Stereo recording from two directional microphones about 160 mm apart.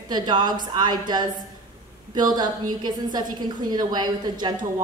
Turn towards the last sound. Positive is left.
turn(degrees=-25)  # may be behind; listen again after turning